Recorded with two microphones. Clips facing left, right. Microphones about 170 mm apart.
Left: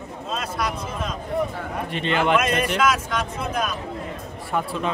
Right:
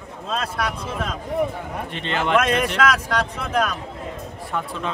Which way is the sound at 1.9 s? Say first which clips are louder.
Left 4 dB; 10° left (ahead or behind).